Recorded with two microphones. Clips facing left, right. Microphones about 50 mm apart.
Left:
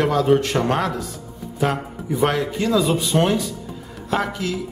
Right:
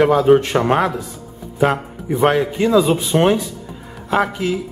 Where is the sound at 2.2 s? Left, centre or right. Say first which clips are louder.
Right 5 dB; right.